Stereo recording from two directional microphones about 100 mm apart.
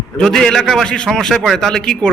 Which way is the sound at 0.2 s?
5° left (ahead or behind).